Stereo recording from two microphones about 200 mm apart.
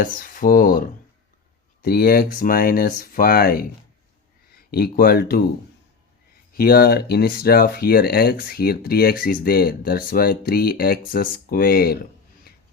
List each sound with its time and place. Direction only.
0.0 s speech: 45° left (ahead or behind)
6.5 s speech: 50° left (ahead or behind)
12.5 s a sound: 50° left (ahead or behind)